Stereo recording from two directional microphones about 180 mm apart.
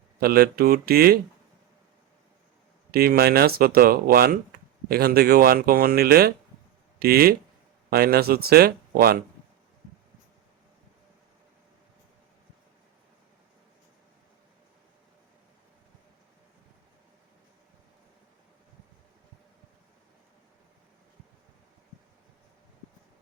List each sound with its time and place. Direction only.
0.2 s speech: 55° right (ahead or behind)
2.9 s speech: 60° right (ahead or behind)